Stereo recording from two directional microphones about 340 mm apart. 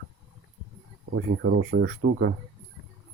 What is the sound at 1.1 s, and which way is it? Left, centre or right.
Speech, right.